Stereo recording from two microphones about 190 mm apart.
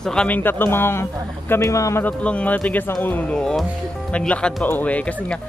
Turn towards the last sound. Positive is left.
turn(degrees=5)  # may be behind; listen again after turning